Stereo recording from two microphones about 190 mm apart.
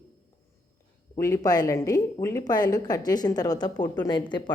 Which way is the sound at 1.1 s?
15° left (ahead or behind).